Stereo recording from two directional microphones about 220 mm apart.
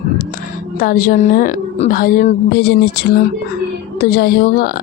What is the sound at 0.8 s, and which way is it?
A woman's voice, 40° left (ahead or behind).